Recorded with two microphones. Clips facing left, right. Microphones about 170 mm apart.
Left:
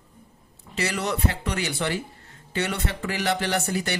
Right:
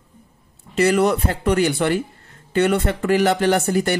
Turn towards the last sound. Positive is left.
turn(degrees=-50)  # may be behind; listen again after turning